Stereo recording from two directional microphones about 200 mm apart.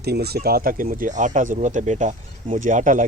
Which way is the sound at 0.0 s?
55° right (ahead or behind).